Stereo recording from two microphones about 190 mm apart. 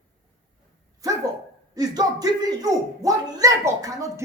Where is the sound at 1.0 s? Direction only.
20° right (ahead or behind).